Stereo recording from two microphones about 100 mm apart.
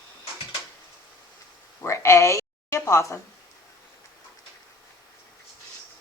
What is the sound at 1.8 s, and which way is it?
Speech, 30° left (ahead or behind).